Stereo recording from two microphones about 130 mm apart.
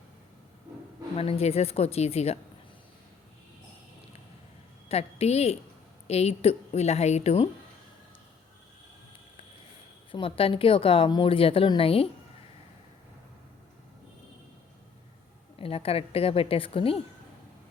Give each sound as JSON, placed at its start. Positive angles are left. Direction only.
{"t": 1.1, "sound": "a woman's voice", "side_deg": 50}
{"t": 4.9, "sound": "a woman's voice", "side_deg": 55}
{"t": 10.1, "sound": "a woman's voice", "side_deg": 45}
{"t": 15.5, "sound": "a woman's voice", "side_deg": 45}